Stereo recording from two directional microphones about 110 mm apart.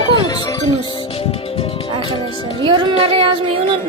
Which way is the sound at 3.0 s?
55° right (ahead or behind).